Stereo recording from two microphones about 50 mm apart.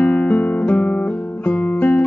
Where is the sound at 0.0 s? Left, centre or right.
Left.